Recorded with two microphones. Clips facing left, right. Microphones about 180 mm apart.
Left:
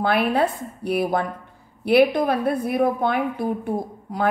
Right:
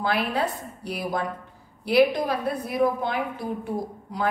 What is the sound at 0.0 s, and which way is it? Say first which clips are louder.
A woman's voice: left 5 dB; 55° left (ahead or behind).